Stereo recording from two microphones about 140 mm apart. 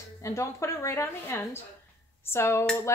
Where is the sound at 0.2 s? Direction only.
20° left (ahead or behind).